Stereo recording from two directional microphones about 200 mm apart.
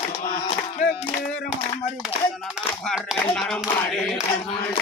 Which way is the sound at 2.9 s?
5° left (ahead or behind).